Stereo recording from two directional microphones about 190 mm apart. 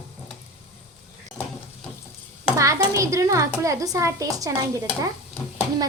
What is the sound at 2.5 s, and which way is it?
A child's voice, 15° right (ahead or behind).